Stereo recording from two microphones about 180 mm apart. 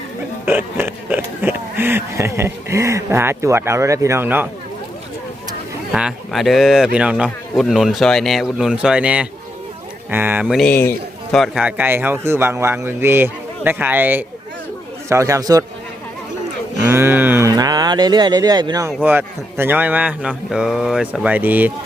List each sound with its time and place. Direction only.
0.4 s speech: 10° right (ahead or behind)
5.9 s a man's voice: 5° right (ahead or behind)
10.6 s a man's voice: 10° left (ahead or behind)
11.3 s a man's voice: centre (ahead or behind); by 15.6 s 20° right (ahead or behind)
16.9 s a man's voice: 10° right (ahead or behind)